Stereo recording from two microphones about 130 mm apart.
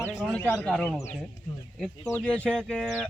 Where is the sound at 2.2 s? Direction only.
10° left (ahead or behind).